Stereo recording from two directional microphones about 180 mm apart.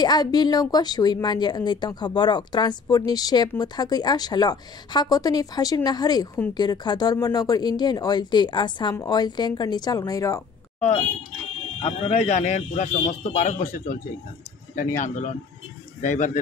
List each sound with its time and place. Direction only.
0.0 s speech: 25° left (ahead or behind)
11.8 s speech: 35° left (ahead or behind)
15.0 s speech: 45° left (ahead or behind)